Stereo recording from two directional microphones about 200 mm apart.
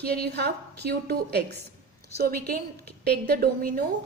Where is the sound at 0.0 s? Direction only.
50° right (ahead or behind).